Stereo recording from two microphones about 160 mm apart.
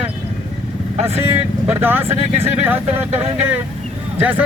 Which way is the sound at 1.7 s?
15° right (ahead or behind).